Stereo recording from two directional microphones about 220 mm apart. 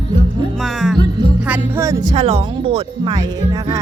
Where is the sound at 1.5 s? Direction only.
10° right (ahead or behind).